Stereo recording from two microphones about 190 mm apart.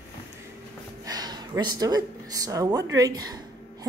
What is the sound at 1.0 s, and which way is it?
A woman's voice, 20° right (ahead or behind).